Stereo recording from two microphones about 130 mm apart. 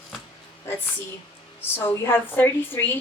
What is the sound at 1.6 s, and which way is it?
A woman's voice, 15° left (ahead or behind).